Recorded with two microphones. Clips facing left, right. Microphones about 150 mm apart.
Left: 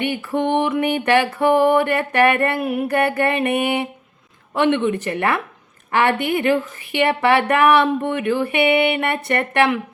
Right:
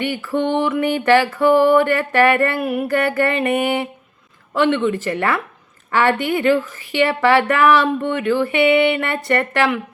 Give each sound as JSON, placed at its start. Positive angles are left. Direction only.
{"t": 0.0, "sound": "speech", "side_deg": 20}